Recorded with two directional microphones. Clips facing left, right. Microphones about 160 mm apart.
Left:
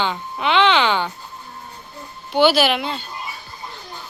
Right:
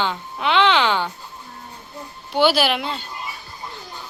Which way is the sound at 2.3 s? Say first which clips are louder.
Left 2 dB; 5° right (ahead or behind).